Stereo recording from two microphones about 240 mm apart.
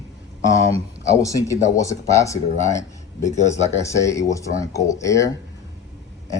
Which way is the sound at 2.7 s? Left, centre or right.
Centre.